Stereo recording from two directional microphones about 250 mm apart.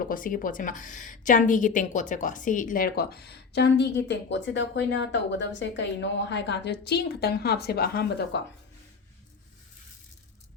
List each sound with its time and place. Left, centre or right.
0.0 s a woman's voice: left